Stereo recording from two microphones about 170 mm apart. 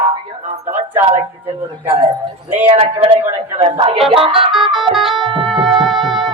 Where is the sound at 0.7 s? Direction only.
10° right (ahead or behind).